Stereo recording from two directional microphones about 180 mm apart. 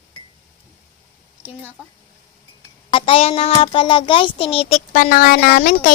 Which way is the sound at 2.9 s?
30° left (ahead or behind).